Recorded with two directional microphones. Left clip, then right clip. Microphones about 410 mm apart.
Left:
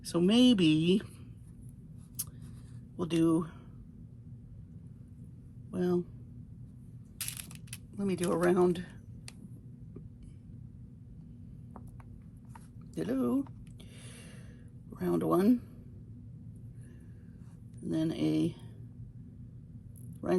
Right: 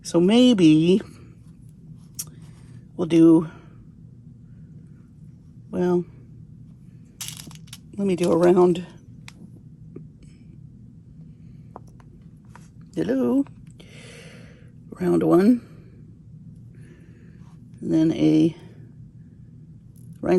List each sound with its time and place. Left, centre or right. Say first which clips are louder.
0.1 s speech: right 9 dB; centre
3.0 s speech: right 13 dB; centre
5.7 s speech: right 9 dB; centre
7.3 s a sound: right 6 dB; centre
8.4 s speech: right 10 dB; centre
12.9 s speech: right 10 dB; centre
13.9 s a sound: right 10 dB; centre
14.9 s speech: right 11 dB; centre
17.8 s speech: right 12 dB; centre